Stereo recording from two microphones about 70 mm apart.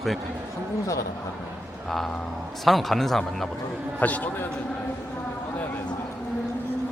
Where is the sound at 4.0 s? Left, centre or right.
Left.